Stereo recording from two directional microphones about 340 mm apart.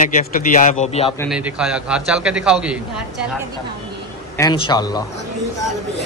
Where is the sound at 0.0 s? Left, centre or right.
Left.